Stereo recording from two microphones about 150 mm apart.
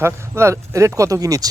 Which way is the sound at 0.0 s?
20° right (ahead or behind).